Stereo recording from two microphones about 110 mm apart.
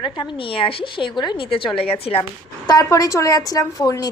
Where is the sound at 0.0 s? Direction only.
45° left (ahead or behind).